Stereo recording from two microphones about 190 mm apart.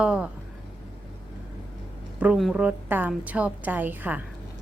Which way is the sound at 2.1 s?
5° right (ahead or behind).